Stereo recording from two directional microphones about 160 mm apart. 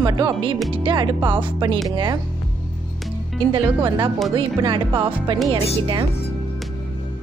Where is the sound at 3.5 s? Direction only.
30° right (ahead or behind).